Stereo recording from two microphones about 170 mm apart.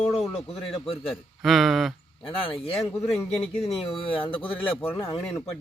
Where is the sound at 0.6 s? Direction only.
35° left (ahead or behind).